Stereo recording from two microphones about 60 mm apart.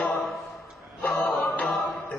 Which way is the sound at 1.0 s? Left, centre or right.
Left.